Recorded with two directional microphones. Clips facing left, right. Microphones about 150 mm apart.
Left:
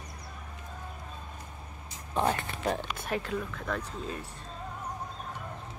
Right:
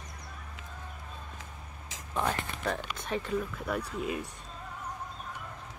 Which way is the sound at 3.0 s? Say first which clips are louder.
Right 1 dB; 5° left (ahead or behind).